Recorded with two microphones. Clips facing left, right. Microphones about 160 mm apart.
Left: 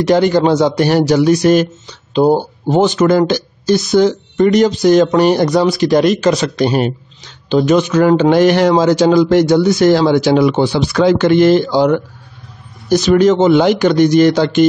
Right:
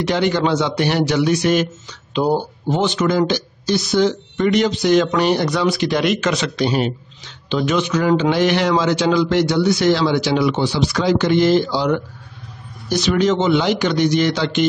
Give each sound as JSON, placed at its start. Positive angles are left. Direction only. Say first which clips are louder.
{"t": 0.0, "sound": "speech", "louder": "left 7 dB", "side_deg": 40}